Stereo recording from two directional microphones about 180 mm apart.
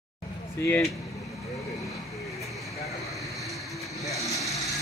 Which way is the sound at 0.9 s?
Centre (ahead or behind).